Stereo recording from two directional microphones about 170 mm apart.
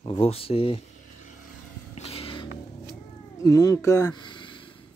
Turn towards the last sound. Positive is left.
turn(degrees=30)  # may be behind; listen again after turning